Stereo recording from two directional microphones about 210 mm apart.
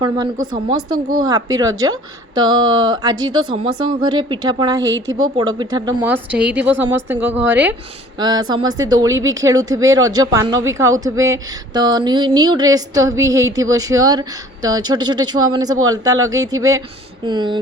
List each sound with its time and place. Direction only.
1.1 s speech: 20° right (ahead or behind)
4.8 s a woman's voice: 65° right (ahead or behind)
5.4 s speech: 20° right (ahead or behind)
6.4 s speech: 5° right (ahead or behind)
8.2 s speech: 20° right (ahead or behind)